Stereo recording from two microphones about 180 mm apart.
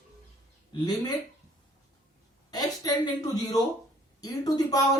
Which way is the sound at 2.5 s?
20° left (ahead or behind).